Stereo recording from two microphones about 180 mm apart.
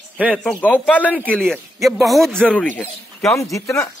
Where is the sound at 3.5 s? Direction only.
15° left (ahead or behind).